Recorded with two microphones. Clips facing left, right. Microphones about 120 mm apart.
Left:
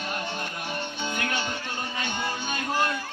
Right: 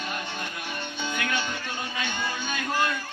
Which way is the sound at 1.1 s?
35° left (ahead or behind).